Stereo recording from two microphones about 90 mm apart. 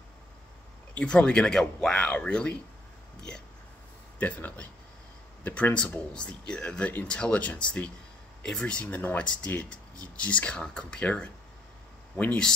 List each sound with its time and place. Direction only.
0.9 s speech: 10° left (ahead or behind)
4.2 s speech: 15° left (ahead or behind)